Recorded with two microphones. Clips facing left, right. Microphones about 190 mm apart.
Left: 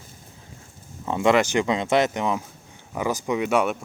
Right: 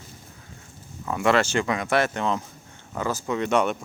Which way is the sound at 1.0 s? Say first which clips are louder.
Left 2 dB; 20° left (ahead or behind).